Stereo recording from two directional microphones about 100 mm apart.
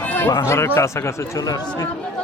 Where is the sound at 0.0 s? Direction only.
15° left (ahead or behind).